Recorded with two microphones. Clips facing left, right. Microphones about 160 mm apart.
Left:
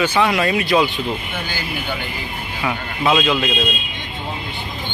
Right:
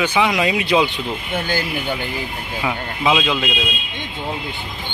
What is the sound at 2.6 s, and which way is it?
Speech, 10° right (ahead or behind).